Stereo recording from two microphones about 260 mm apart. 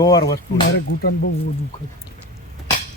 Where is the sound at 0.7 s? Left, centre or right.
Left.